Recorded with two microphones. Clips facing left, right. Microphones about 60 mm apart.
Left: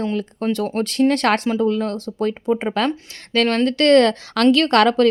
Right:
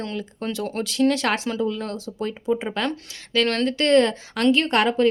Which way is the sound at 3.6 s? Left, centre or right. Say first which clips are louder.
Left 5 dB; left.